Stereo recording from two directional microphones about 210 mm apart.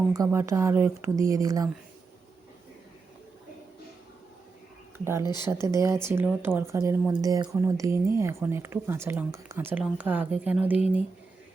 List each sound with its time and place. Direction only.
0.1 s speech: 15° right (ahead or behind)
5.2 s speech: 20° left (ahead or behind)
5.5 s speech: 15° right (ahead or behind)